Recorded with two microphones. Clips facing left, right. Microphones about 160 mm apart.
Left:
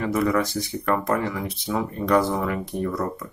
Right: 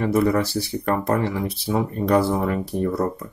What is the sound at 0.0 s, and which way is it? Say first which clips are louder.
Speech: right 3 dB; 30° right (ahead or behind).